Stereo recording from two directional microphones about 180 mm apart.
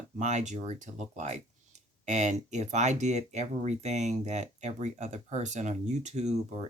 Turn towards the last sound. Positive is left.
turn(degrees=-35)  # may be behind; listen again after turning